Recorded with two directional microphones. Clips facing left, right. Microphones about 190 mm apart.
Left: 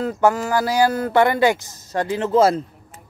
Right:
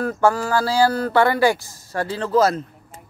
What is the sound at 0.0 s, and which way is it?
Speech, 20° left (ahead or behind).